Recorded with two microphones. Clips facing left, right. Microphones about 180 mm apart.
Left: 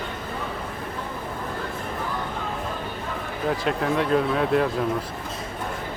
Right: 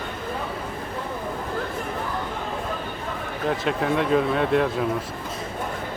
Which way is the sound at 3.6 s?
Centre (ahead or behind).